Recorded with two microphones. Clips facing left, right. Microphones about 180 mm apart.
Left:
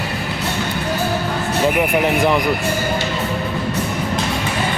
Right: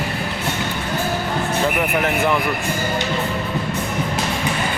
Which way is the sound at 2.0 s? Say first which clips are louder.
Left 2 dB; 15° left (ahead or behind).